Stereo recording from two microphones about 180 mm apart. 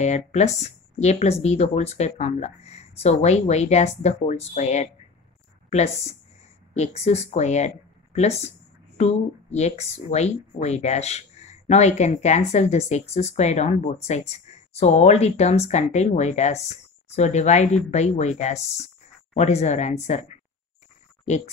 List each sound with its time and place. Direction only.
0.0 s speech: 40° left (ahead or behind)